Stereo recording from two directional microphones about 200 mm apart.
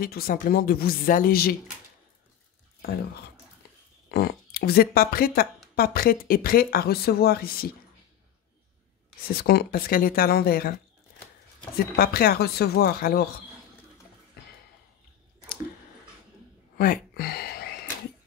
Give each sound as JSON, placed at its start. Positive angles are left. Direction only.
{"t": 0.0, "sound": "speech", "side_deg": 50}
{"t": 4.1, "sound": "speech", "side_deg": 50}
{"t": 9.3, "sound": "speech", "side_deg": 50}
{"t": 12.0, "sound": "speech", "side_deg": 50}
{"t": 16.7, "sound": "a sound", "side_deg": 50}